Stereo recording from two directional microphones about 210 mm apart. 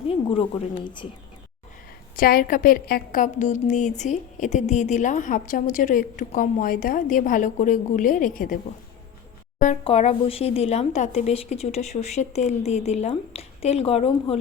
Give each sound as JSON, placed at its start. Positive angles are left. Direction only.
{"t": 0.1, "sound": "a woman's voice", "side_deg": 25}
{"t": 2.1, "sound": "a woman's voice", "side_deg": 45}
{"t": 9.8, "sound": "a woman's voice", "side_deg": 30}